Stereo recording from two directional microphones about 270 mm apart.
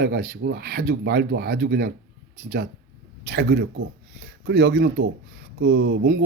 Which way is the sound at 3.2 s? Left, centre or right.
Right.